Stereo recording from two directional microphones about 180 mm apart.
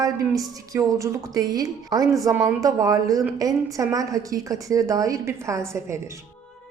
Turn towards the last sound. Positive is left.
turn(degrees=-15)  # may be behind; listen again after turning